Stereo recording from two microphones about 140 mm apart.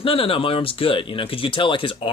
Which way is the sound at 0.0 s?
40° left (ahead or behind).